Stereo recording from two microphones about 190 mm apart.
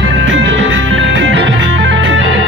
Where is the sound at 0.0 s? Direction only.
80° right.